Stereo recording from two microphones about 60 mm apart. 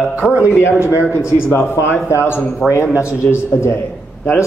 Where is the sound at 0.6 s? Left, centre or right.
Left.